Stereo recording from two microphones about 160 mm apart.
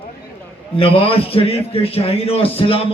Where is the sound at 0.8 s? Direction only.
35° left (ahead or behind).